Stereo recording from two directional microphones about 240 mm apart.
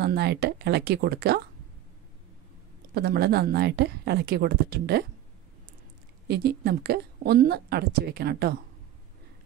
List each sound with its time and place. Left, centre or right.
0.0 s speech: right
2.9 s a woman's voice: right
6.2 s a woman's voice: right